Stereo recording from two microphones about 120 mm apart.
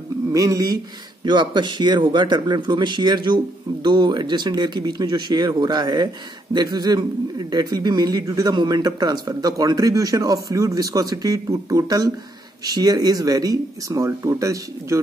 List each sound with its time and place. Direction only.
0.3 s speech: 30° right (ahead or behind)